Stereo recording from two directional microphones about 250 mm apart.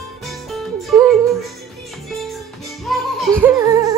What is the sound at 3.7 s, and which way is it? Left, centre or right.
Humming, centre.